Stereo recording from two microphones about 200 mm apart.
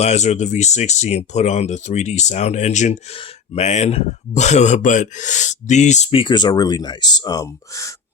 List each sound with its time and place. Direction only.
0.0 s speech: 35° left (ahead or behind); by 7.9 s 15° left (ahead or behind)